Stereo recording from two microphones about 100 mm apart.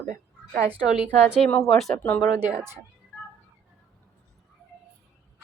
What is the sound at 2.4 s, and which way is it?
Speech, 20° right (ahead or behind).